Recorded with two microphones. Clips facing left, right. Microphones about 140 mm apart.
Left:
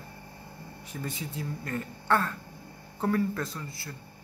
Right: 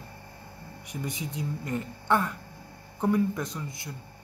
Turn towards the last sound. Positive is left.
turn(degrees=-20)  # may be behind; listen again after turning